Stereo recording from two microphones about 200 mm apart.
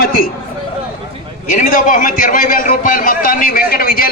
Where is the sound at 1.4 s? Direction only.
40° left (ahead or behind).